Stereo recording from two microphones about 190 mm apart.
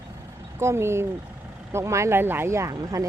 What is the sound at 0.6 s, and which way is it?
Speech, 15° right (ahead or behind).